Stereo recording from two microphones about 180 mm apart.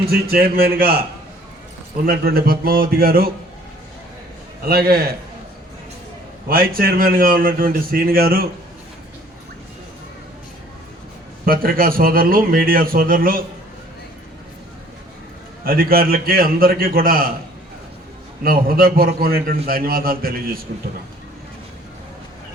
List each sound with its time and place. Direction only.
0.1 s a man's voice: 55° right (ahead or behind)
2.0 s a man's voice: 55° right (ahead or behind)
4.6 s a man's voice: 55° right (ahead or behind)
6.5 s a man's voice: 55° right (ahead or behind)
11.4 s a man's voice: 55° right (ahead or behind)
15.6 s a man's voice: 55° right (ahead or behind)
18.4 s a man's voice: 55° right (ahead or behind)